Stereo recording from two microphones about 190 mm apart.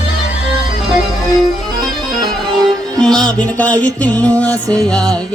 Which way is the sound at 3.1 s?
5° left (ahead or behind).